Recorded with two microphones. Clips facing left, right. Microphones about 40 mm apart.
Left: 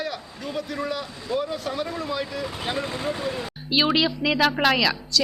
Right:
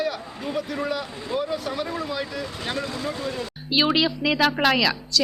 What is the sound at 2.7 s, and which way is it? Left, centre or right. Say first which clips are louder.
Speech: even; left.